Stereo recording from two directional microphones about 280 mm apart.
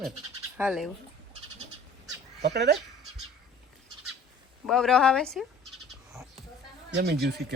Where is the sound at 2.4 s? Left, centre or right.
Right.